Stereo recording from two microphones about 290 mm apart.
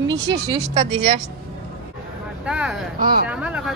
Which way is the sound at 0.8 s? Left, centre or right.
Right.